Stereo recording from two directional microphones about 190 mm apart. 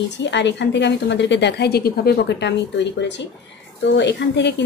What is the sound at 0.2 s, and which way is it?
A woman's voice, 70° left (ahead or behind).